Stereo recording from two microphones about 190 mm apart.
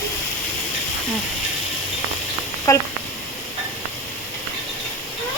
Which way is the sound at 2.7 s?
15° left (ahead or behind).